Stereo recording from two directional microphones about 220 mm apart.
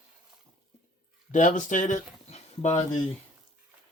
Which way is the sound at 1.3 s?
35° left (ahead or behind).